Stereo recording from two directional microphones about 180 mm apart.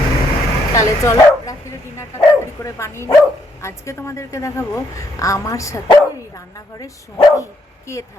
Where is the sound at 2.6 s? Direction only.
15° left (ahead or behind).